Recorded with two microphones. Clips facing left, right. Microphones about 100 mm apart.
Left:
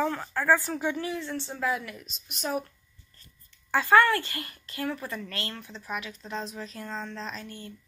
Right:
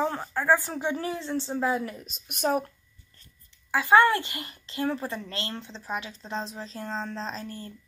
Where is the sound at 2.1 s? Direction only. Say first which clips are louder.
Right 5 dB; 50° right (ahead or behind).